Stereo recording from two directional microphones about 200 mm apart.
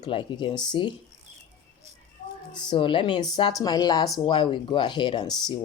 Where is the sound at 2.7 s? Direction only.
25° left (ahead or behind).